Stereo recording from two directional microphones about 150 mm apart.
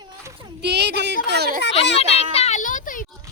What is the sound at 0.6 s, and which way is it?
Speech, 90° right.